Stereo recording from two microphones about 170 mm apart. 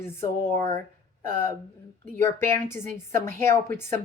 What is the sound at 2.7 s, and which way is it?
Speech, 15° left (ahead or behind).